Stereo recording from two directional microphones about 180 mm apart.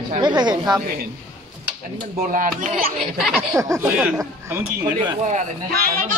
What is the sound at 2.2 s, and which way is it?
Speech, 50° right (ahead or behind).